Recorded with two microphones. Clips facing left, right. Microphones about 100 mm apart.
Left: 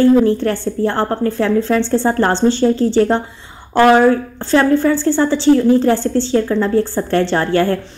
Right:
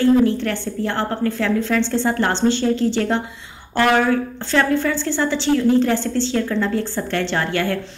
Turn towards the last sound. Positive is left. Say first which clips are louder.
# left 6 dB
turn(degrees=35)  # may be behind; listen again after turning